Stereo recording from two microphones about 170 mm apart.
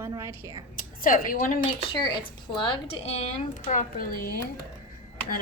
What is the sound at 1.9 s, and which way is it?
A woman's voice, 25° left (ahead or behind).